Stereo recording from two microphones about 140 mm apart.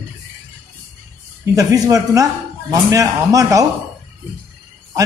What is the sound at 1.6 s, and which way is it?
A man's voice, 25° right (ahead or behind).